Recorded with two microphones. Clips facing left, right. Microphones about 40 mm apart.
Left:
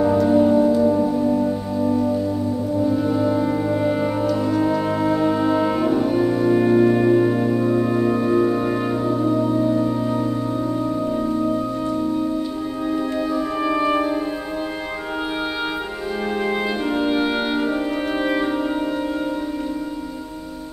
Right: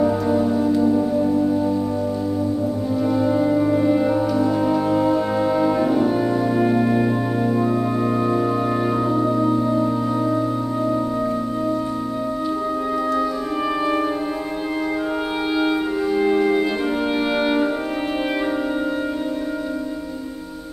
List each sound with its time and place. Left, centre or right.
0.0 s music: centre
2.9 s french horn: centre
4.6 s brass instrument: centre
5.9 s music: centre
8.9 s music: centre
9.2 s music: centre
13.7 s music: centre